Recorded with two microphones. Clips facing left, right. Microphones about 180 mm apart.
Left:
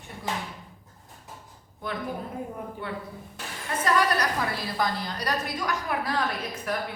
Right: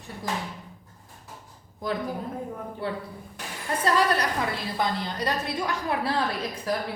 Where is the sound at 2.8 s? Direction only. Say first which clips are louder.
Right 3 dB; 35° right (ahead or behind).